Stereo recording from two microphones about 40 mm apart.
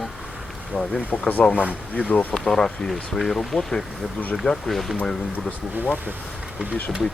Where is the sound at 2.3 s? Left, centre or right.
Centre.